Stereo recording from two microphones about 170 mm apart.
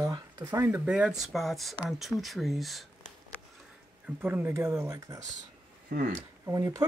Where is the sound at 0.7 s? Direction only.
10° right (ahead or behind).